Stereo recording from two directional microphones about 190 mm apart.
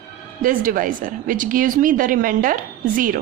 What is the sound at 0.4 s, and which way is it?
A woman's voice, 45° right (ahead or behind).